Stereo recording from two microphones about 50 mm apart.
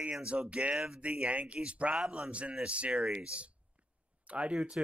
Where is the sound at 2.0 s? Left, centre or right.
Centre.